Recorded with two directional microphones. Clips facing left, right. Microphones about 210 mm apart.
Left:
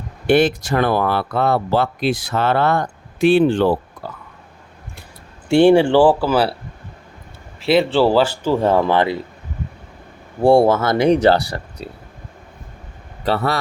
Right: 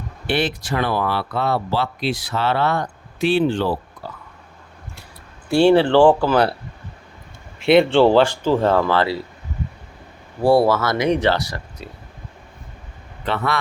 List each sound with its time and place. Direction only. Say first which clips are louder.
0.3 s speech: left 7 dB; 45° left (ahead or behind)
4.0 s a sound: left 2 dB; 50° left (ahead or behind)
5.5 s speech: left 2 dB; 15° left (ahead or behind)
7.6 s speech: right 2 dB; centre (ahead or behind); by 9.2 s 20° left (ahead or behind)
10.5 s speech: left 2 dB; 25° left (ahead or behind)
13.2 s speech: left 3 dB; 35° left (ahead or behind)